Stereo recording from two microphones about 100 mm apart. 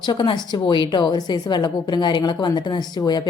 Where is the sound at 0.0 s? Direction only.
50° left (ahead or behind).